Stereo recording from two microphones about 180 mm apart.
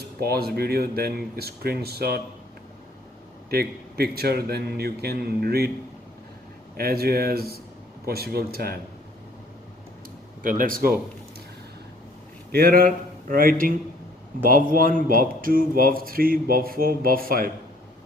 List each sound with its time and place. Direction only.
0.2 s a man's voice: 60° right (ahead or behind)
3.5 s a man's voice: 60° right (ahead or behind)
6.7 s a man's voice: 60° right (ahead or behind)
10.4 s speech: 50° right (ahead or behind)
12.5 s a man's voice: 60° right (ahead or behind)